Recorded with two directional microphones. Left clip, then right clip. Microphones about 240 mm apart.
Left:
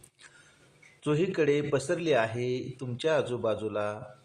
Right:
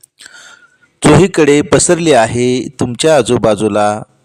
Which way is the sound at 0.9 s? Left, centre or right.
Right.